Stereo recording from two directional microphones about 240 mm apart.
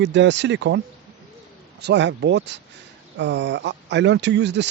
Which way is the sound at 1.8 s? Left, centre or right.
Right.